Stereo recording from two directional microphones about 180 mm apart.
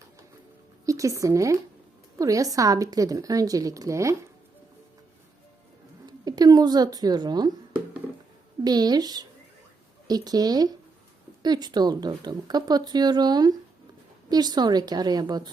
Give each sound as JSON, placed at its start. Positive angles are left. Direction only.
{"t": 0.9, "sound": "a woman's voice", "side_deg": -15}
{"t": 6.1, "sound": "speech", "side_deg": -20}
{"t": 8.6, "sound": "a woman's voice", "side_deg": -20}